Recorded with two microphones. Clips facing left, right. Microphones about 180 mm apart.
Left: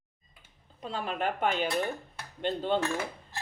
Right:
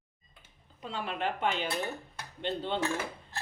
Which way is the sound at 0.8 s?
40° left (ahead or behind).